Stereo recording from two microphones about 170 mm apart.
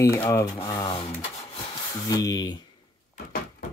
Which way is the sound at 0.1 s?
15° left (ahead or behind).